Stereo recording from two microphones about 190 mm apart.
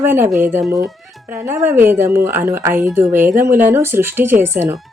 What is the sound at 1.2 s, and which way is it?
A woman's voice, 10° right (ahead or behind).